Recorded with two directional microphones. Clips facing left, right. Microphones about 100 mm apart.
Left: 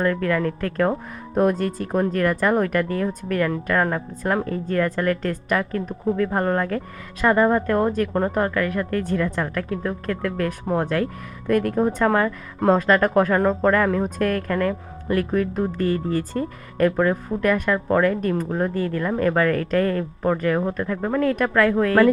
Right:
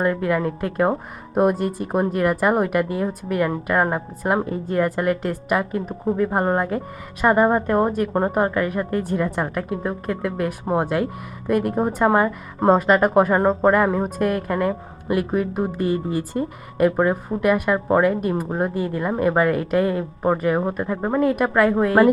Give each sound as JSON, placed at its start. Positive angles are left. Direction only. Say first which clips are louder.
{"t": 0.0, "sound": "a woman's voice", "louder": "right 1 dB", "side_deg": -20}